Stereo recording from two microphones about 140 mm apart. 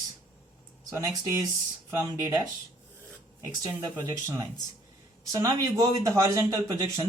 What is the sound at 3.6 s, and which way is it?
A man's voice, 30° right (ahead or behind).